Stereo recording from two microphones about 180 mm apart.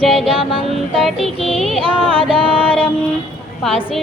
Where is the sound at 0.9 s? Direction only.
Centre (ahead or behind).